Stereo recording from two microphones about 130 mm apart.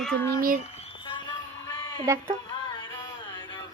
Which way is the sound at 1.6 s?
30° left (ahead or behind).